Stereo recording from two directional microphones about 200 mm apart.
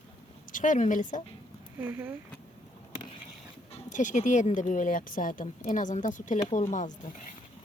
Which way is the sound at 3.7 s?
40° left (ahead or behind).